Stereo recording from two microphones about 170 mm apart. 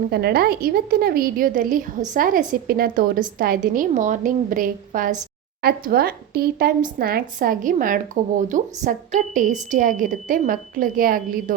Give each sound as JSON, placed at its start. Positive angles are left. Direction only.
{"t": 0.1, "sound": "a woman's voice", "side_deg": -70}
{"t": 5.6, "sound": "a woman's voice", "side_deg": -65}